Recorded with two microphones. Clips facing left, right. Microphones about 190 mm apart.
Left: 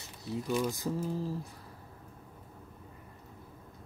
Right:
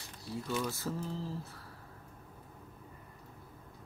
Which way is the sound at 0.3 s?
15° left (ahead or behind).